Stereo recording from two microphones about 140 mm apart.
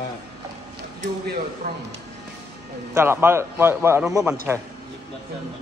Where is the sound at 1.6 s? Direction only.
90° right.